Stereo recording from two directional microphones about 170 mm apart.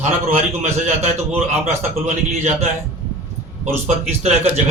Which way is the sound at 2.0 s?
45° right (ahead or behind).